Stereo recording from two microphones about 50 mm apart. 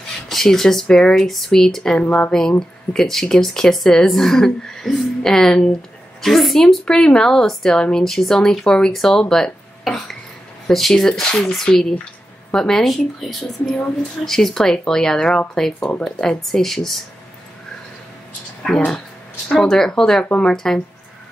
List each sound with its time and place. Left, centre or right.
0.3 s speech: centre
1.1 s speech: centre
18.7 s speech: centre
20.5 s speech: centre